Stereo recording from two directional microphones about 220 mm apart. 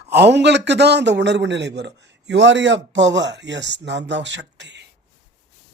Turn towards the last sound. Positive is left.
turn(degrees=-55)  # may be behind; listen again after turning